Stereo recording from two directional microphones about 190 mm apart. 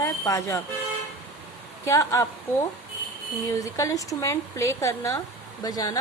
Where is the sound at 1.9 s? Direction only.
15° left (ahead or behind).